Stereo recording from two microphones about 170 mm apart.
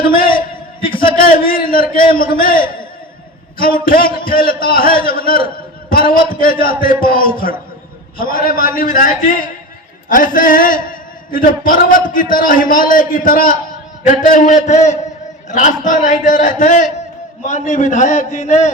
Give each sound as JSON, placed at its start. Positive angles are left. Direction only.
{"t": 0.0, "sound": "a man's voice", "side_deg": 60}